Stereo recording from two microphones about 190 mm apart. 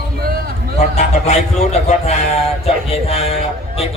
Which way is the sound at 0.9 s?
35° left (ahead or behind).